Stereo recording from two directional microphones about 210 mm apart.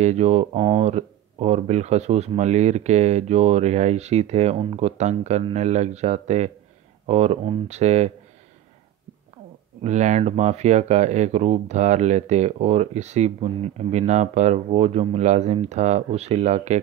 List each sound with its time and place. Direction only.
0.0 s speech: 30° right (ahead or behind)
9.8 s speech: 35° right (ahead or behind)